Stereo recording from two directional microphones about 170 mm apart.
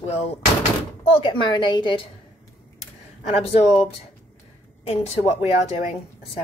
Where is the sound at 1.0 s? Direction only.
30° left (ahead or behind).